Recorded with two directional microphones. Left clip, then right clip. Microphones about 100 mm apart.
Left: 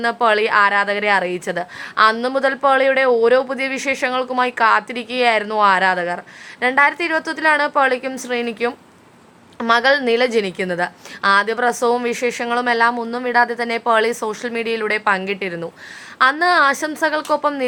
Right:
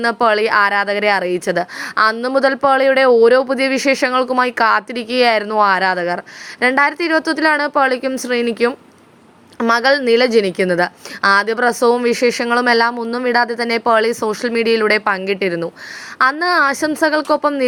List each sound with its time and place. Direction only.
0.0 s a woman's voice: 45° right (ahead or behind)